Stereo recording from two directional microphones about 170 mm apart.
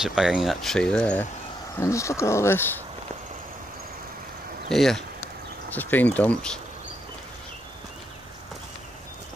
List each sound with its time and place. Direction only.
0.0 s speech: 5° right (ahead or behind)
1.8 s speech: 15° left (ahead or behind)
4.6 s speech: centre (ahead or behind)